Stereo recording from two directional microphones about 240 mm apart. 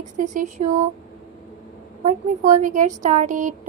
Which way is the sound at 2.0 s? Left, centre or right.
Right.